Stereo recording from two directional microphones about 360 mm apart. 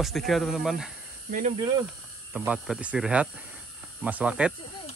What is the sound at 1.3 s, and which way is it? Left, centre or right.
Speech, centre.